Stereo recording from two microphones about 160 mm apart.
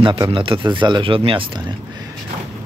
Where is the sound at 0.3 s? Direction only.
35° right (ahead or behind).